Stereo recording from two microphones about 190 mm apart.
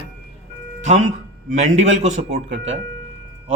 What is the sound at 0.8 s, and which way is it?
A man's voice, 40° right (ahead or behind).